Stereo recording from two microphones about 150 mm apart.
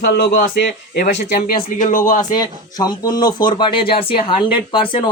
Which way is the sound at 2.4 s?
25° left (ahead or behind).